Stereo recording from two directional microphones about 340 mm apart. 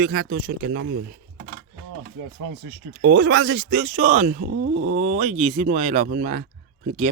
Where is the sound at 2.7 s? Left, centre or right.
Right.